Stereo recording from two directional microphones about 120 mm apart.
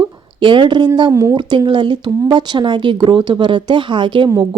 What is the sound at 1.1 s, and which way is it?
Speech, 25° right (ahead or behind).